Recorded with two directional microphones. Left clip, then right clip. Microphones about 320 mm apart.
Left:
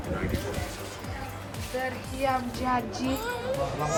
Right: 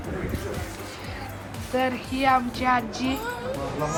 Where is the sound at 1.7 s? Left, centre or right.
Centre.